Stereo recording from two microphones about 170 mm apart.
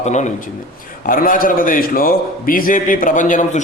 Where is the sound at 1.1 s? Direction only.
55° left (ahead or behind).